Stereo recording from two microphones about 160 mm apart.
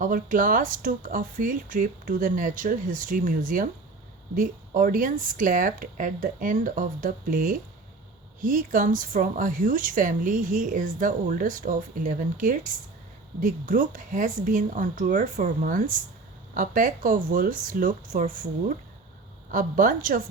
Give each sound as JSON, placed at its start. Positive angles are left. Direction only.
{"t": 0.0, "sound": "a woman's voice", "side_deg": -55}
{"t": 19.5, "sound": "a woman's voice", "side_deg": -55}